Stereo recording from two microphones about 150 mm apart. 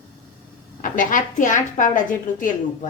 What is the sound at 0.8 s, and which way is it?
A woman's voice, 60° left (ahead or behind).